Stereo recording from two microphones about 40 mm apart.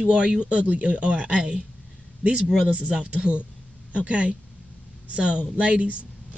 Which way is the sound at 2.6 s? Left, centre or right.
Right.